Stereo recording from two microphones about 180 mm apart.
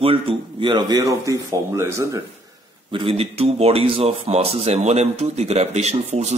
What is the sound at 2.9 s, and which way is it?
Speech, 30° right (ahead or behind).